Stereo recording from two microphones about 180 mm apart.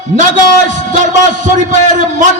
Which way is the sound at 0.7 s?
45° right (ahead or behind).